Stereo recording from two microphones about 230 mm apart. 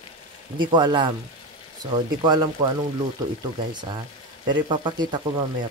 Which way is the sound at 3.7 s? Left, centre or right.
Centre.